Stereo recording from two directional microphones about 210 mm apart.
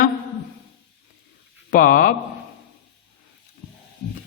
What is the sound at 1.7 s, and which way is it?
Speech, 40° left (ahead or behind).